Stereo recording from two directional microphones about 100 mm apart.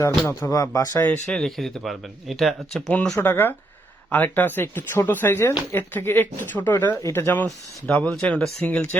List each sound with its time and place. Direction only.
0.5 s speech: 35° left (ahead or behind)
1.0 s speech: 5° left (ahead or behind)
3.2 s speech: 20° left (ahead or behind)